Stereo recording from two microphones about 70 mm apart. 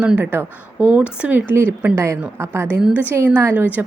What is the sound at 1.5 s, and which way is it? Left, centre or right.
Speech, right.